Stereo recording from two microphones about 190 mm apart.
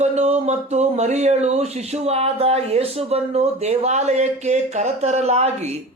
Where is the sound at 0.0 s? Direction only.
35° right (ahead or behind).